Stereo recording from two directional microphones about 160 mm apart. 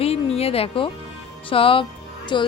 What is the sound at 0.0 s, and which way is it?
Music, 40° left (ahead or behind).